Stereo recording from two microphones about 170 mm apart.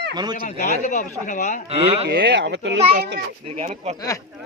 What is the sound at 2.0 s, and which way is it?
Speech, 85° right.